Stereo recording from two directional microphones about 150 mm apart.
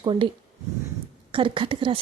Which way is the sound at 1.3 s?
35° right (ahead or behind).